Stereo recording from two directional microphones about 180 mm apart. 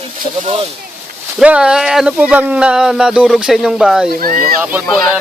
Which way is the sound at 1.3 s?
5° right (ahead or behind).